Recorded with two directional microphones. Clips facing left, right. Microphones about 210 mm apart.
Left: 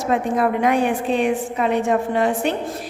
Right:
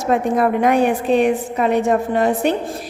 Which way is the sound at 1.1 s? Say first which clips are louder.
Right 4 dB; 40° right (ahead or behind).